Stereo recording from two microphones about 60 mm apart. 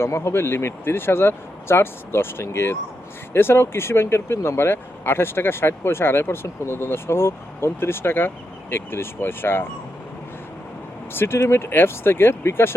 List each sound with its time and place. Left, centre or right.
0.0 s speech: left
11.1 s speech: left